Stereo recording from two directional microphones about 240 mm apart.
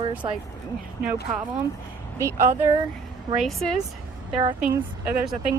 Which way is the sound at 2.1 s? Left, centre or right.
Centre.